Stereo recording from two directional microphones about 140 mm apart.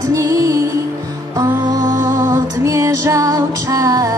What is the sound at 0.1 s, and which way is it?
Music, 25° right (ahead or behind).